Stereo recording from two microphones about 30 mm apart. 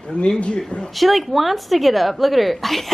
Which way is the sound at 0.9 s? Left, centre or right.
Centre.